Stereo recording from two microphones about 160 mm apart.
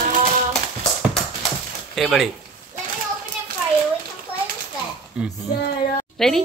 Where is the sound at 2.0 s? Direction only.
Centre (ahead or behind).